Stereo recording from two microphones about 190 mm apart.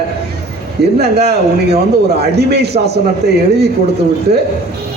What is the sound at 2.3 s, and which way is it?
Speech, 60° right (ahead or behind).